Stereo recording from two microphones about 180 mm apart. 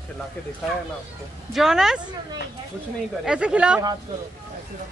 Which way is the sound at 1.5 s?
Centre (ahead or behind).